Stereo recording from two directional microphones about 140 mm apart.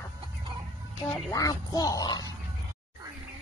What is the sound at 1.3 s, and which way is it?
Speech, 25° left (ahead or behind).